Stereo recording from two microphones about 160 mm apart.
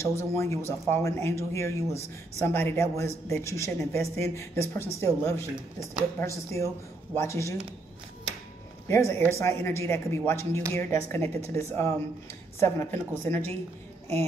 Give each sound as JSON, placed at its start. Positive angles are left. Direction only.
{"t": 0.0, "sound": "speech", "side_deg": 15}
{"t": 8.8, "sound": "speech", "side_deg": 15}